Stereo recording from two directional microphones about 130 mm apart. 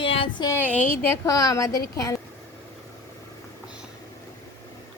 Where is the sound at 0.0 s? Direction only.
40° left (ahead or behind).